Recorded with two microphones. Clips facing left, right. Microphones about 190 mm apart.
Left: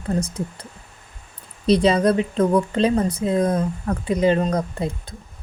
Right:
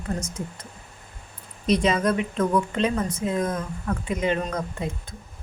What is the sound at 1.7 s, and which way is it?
Speech, 35° left (ahead or behind).